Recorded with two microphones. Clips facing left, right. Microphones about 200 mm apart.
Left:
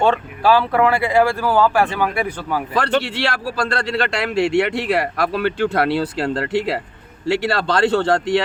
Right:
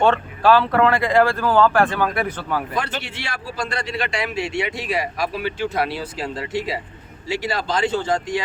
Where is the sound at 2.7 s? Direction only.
70° left (ahead or behind).